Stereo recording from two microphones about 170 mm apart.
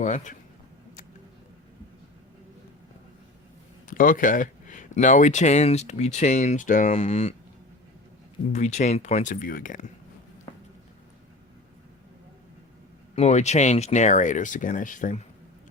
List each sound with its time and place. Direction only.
0.0 s speech: 45° left (ahead or behind)
3.8 s speech: 50° left (ahead or behind)
8.5 s speech: 45° left (ahead or behind)
13.1 s speech: 40° left (ahead or behind)